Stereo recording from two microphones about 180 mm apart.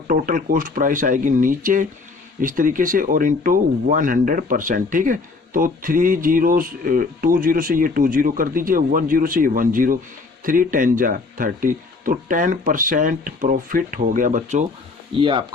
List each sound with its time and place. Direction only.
0.1 s speech: 50° right (ahead or behind)
15.1 s speech: 25° right (ahead or behind)